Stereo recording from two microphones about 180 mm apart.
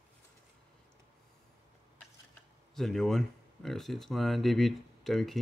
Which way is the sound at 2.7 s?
Centre (ahead or behind).